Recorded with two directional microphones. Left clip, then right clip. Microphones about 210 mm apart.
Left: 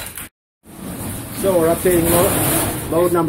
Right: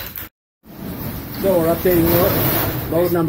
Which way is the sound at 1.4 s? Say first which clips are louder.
Left 1 dB; centre (ahead or behind).